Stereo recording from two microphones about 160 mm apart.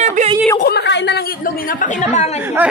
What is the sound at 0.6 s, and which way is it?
A woman's voice, 90° left.